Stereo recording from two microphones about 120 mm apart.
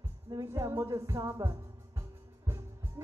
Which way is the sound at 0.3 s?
25° right (ahead or behind).